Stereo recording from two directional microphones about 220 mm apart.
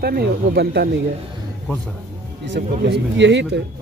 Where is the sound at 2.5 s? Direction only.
55° right (ahead or behind).